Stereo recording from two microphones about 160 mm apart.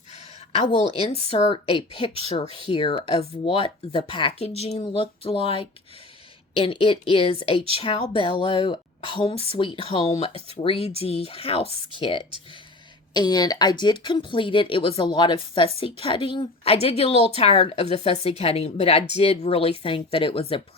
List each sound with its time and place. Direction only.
0.5 s a woman's voice: 35° left (ahead or behind)